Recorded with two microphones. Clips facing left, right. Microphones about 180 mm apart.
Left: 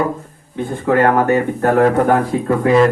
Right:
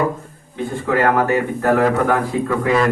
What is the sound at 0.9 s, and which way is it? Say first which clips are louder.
Speech: left 3 dB; 40° left (ahead or behind).